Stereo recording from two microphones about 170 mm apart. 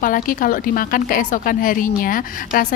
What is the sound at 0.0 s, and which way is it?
A woman's voice, 55° left (ahead or behind).